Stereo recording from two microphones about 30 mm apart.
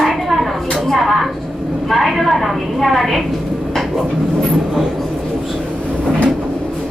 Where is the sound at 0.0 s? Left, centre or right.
Centre.